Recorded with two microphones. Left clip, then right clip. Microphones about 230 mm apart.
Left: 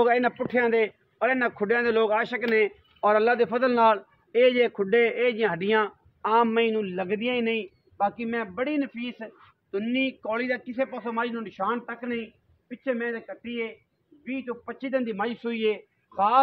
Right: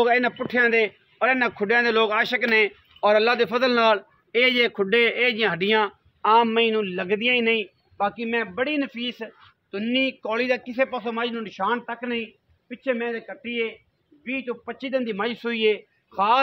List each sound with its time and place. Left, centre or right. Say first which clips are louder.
0.0 s a man's voice: right 2 dB; right